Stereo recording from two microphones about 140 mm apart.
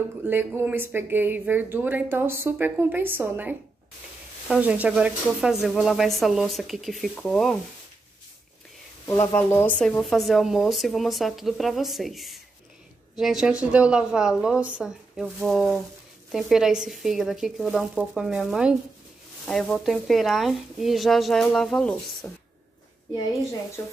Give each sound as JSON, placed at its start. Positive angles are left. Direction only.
{"t": 0.2, "sound": "speech", "side_deg": -15}
{"t": 9.0, "sound": "speech", "side_deg": 20}
{"t": 9.8, "sound": "speech", "side_deg": 5}
{"t": 23.8, "sound": "speech", "side_deg": 20}